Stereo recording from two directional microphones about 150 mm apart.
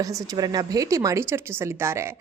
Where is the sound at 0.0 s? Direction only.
25° right (ahead or behind).